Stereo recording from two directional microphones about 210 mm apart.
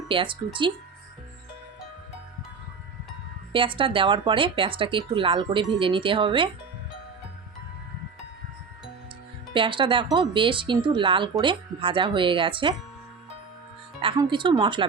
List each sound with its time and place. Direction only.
0.1 s speech: 25° right (ahead or behind)
3.5 s speech: 25° right (ahead or behind)
9.6 s speech: 25° right (ahead or behind)
14.0 s speech: 25° right (ahead or behind)